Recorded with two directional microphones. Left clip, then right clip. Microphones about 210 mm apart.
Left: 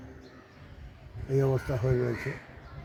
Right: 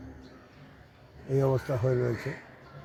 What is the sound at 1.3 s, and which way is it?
Speech, 20° right (ahead or behind).